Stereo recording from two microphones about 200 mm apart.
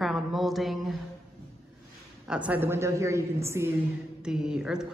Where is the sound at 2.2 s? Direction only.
5° right (ahead or behind).